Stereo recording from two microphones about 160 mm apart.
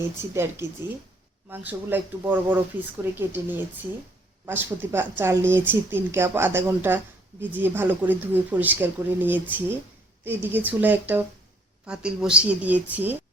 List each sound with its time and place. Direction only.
0.2 s speech: 15° right (ahead or behind)